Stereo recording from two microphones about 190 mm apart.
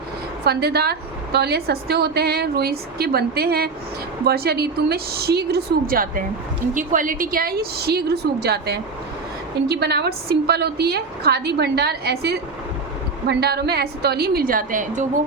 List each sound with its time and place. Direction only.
0.4 s a woman's voice: 55° right (ahead or behind)